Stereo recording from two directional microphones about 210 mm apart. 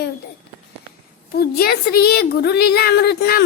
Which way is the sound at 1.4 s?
50° left (ahead or behind).